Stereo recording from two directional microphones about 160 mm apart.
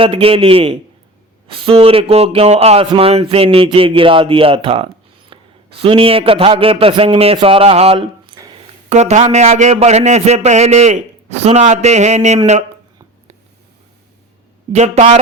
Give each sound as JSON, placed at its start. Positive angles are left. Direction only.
{"t": 0.0, "sound": "speech", "side_deg": -35}
{"t": 5.3, "sound": "a sound", "side_deg": -30}
{"t": 5.8, "sound": "a man's voice", "side_deg": -35}
{"t": 14.7, "sound": "a man's voice", "side_deg": -45}